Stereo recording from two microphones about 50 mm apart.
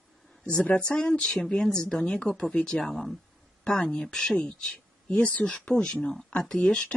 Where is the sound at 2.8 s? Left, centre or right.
Centre.